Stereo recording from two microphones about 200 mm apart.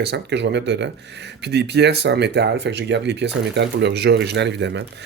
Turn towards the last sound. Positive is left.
turn(degrees=-60)  # may be behind; listen again after turning